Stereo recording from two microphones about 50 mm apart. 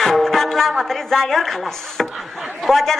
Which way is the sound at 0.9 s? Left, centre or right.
Centre.